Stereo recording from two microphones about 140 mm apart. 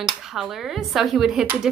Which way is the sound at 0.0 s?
5° right (ahead or behind).